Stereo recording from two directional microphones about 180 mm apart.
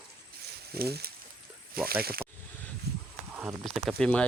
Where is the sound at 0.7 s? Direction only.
60° right (ahead or behind).